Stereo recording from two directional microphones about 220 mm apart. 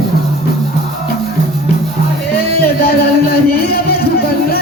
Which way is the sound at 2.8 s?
45° left (ahead or behind).